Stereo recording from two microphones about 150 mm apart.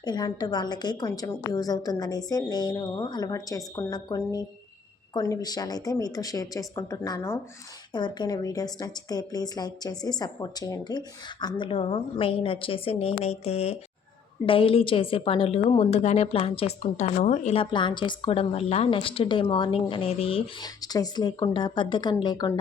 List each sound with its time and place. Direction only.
0.0 s a woman's voice: 30° left (ahead or behind)
20.8 s a woman's voice: 25° left (ahead or behind)